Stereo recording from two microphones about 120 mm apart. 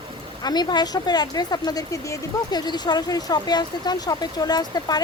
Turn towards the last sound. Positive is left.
turn(degrees=35)  # may be behind; listen again after turning